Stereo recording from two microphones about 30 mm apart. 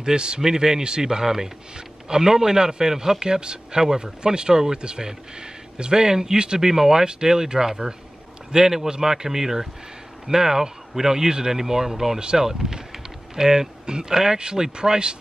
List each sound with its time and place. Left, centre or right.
0.0 s a man's voice: right
6.7 s a man's voice: centre